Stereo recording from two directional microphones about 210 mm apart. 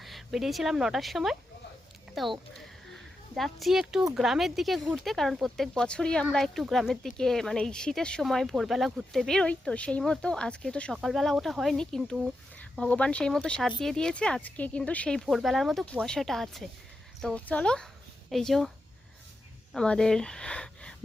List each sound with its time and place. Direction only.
0.0 s speech: centre (ahead or behind)
2.9 s a sound: centre (ahead or behind)
4.1 s speech: centre (ahead or behind)
19.7 s speech: 5° left (ahead or behind)